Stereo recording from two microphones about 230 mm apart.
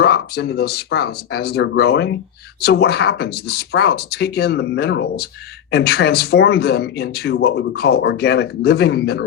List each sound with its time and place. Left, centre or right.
0.0 s speech: left